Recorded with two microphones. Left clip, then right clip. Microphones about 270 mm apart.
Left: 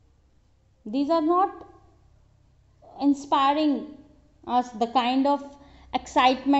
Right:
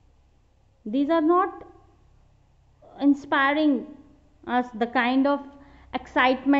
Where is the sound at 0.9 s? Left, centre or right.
Right.